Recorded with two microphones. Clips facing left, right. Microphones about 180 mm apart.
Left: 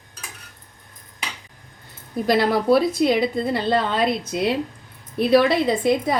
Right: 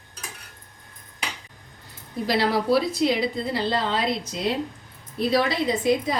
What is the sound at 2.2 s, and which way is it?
A woman's voice, 50° left (ahead or behind).